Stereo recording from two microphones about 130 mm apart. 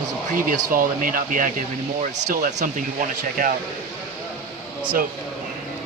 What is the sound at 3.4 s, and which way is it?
Speech, 90° right.